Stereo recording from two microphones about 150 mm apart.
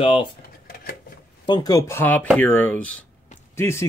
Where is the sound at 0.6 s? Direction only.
85° left.